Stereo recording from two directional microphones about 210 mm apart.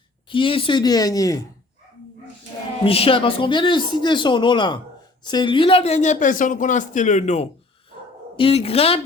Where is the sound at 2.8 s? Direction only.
25° left (ahead or behind).